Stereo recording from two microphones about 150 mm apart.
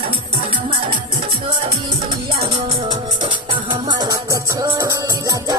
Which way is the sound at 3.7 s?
30° right (ahead or behind).